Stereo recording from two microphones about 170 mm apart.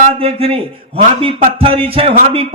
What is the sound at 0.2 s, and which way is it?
A man's voice, 35° right (ahead or behind).